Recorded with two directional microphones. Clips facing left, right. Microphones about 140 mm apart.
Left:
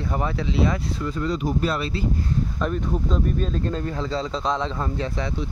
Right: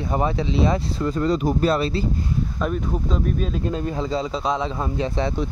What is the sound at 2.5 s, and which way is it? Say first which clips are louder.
Speech: right 1 dB; 5° right (ahead or behind).